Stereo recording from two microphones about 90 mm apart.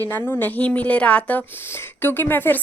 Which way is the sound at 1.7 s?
25° left (ahead or behind).